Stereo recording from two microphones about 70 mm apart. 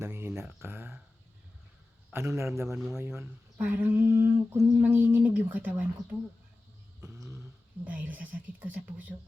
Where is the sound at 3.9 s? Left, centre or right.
Right.